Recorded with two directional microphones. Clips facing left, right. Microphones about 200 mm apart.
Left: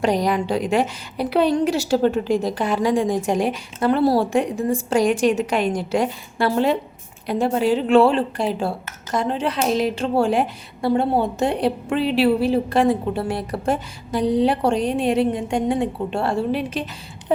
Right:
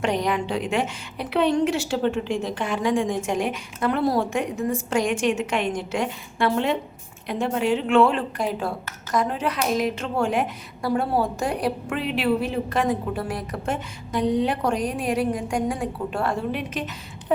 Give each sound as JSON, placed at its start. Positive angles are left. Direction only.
{"t": 0.0, "sound": "a woman's voice", "side_deg": 35}